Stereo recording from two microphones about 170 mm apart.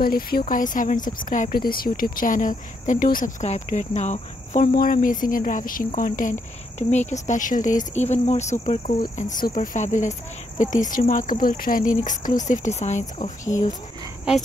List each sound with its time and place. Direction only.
0.0 s speech: 60° left (ahead or behind); by 4.6 s 40° left (ahead or behind)
4.7 s speech: 55° left (ahead or behind)